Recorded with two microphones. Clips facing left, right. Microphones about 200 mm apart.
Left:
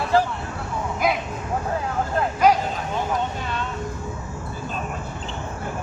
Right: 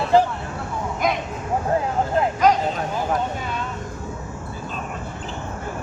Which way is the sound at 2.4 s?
10° left (ahead or behind).